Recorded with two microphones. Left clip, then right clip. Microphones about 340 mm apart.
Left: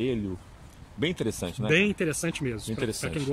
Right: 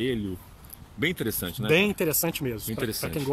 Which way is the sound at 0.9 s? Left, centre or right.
Centre.